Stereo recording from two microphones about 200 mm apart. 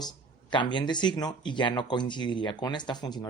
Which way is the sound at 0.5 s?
25° left (ahead or behind).